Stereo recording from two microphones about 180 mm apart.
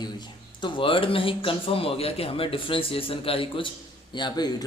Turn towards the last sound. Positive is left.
turn(degrees=25)  # may be behind; listen again after turning